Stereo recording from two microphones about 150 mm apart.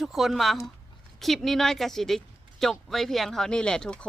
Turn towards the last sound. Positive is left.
turn(degrees=5)  # may be behind; listen again after turning